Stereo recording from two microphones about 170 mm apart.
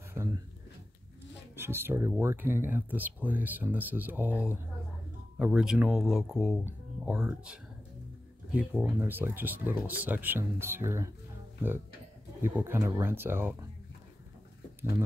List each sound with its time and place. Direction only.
0.1 s speech: 15° right (ahead or behind)
1.5 s speech: 15° right (ahead or behind)
12.5 s speech: 15° right (ahead or behind)